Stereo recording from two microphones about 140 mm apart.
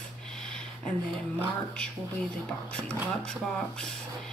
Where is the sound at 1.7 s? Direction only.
10° left (ahead or behind).